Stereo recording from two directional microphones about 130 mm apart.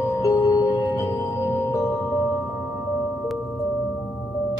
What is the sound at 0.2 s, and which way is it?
Music, 25° left (ahead or behind).